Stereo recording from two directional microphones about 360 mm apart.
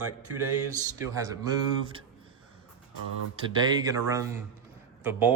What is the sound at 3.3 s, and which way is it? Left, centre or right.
A man's voice, centre.